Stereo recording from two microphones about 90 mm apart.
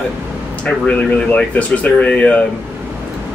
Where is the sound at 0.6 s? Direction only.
15° left (ahead or behind).